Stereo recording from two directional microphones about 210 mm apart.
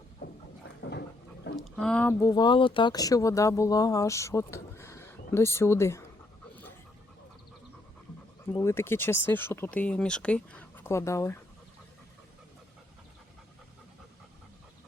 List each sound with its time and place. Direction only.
0.8 s dog: 55° left (ahead or behind)
1.5 s speech: centre (ahead or behind)
8.5 s speech: 10° left (ahead or behind)